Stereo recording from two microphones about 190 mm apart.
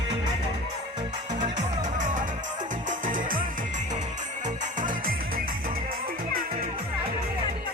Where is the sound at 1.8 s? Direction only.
40° right (ahead or behind).